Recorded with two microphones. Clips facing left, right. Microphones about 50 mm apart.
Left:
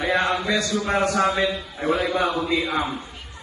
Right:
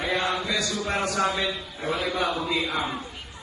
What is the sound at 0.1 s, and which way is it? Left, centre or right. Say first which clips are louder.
Chant: left 5 dB; left.